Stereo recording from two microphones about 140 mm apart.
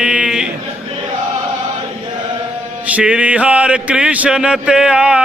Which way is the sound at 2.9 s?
10° right (ahead or behind).